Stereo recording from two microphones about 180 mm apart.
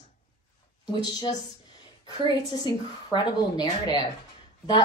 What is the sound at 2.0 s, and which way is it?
A woman's voice, 25° left (ahead or behind).